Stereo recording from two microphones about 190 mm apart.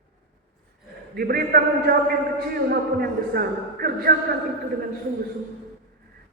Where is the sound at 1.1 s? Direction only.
55° right (ahead or behind).